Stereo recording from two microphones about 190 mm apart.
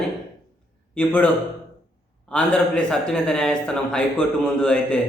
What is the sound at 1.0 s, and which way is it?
A man's voice, 10° left (ahead or behind).